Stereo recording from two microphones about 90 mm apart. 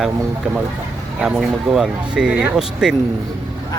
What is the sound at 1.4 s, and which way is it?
Speech, 5° right (ahead or behind).